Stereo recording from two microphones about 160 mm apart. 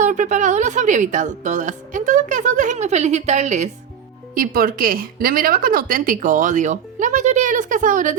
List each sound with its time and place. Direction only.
0.0 s a woman's voice: 50° right (ahead or behind)
4.4 s a woman's voice: 65° right (ahead or behind)